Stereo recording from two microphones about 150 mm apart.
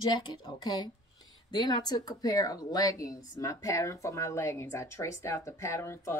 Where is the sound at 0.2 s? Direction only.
25° left (ahead or behind).